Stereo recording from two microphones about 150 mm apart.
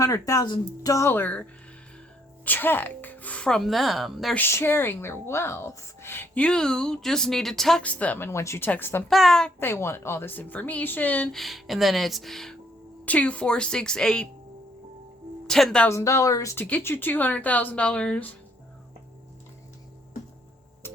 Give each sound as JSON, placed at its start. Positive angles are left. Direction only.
{"t": 0.0, "sound": "speech", "side_deg": 20}
{"t": 4.4, "sound": "speech", "side_deg": 15}
{"t": 9.0, "sound": "speech", "side_deg": 0}
{"t": 9.6, "sound": "speech", "side_deg": 15}
{"t": 15.4, "sound": "speech", "side_deg": 0}
{"t": 15.9, "sound": "speech", "side_deg": 20}
{"t": 20.8, "sound": "music", "side_deg": 15}